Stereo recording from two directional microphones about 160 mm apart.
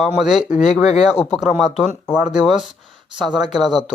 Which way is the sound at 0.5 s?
45° left (ahead or behind).